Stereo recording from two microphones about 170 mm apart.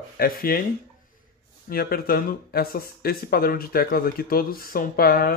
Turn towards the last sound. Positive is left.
turn(degrees=60)  # may be behind; listen again after turning